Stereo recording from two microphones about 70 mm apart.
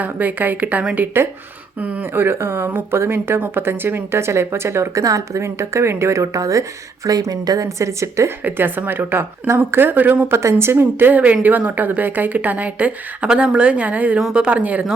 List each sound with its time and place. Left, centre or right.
0.0 s a woman's voice: right
8.4 s a woman's voice: right
14.2 s speech: centre
14.4 s a woman's voice: centre